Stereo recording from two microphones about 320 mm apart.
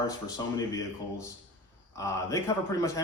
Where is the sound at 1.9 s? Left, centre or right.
Centre.